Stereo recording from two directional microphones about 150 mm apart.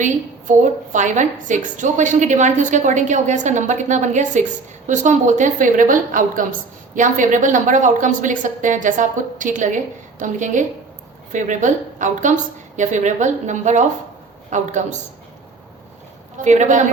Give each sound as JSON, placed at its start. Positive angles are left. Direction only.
{"t": 0.0, "sound": "a woman's voice", "side_deg": -55}
{"t": 16.4, "sound": "speech", "side_deg": -55}